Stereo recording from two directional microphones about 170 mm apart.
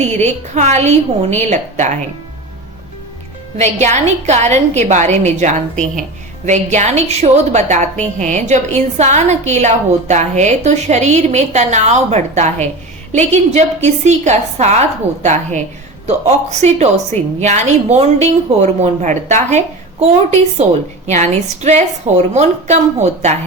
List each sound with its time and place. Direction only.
0.0 s a woman's voice: 40° right (ahead or behind)
3.6 s a woman's voice: 45° right (ahead or behind)